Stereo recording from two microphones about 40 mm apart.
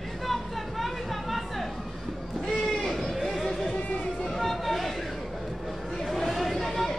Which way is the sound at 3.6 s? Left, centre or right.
Left.